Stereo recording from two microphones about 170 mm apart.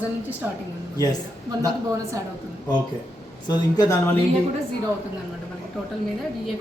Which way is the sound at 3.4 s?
25° left (ahead or behind).